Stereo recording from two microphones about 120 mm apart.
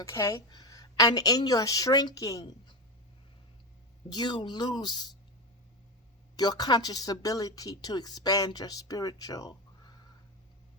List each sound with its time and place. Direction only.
0.0 s speech: 25° left (ahead or behind)
2.4 s speech: 40° left (ahead or behind)
4.1 s speech: 35° left (ahead or behind)
6.3 s speech: 35° left (ahead or behind)